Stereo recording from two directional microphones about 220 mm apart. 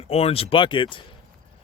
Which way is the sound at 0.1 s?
25° left (ahead or behind).